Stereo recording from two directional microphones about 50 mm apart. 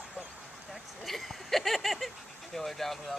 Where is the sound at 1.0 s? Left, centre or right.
Centre.